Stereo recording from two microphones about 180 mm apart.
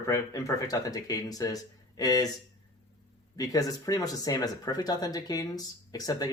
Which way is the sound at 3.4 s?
20° left (ahead or behind).